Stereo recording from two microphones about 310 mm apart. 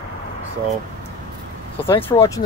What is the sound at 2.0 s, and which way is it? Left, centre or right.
Speech, centre.